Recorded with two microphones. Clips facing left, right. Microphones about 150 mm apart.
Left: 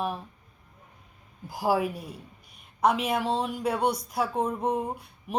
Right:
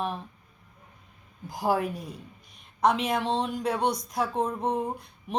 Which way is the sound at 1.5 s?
5° left (ahead or behind).